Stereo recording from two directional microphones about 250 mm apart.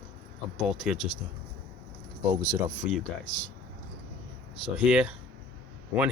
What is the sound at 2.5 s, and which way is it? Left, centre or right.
Speech, centre.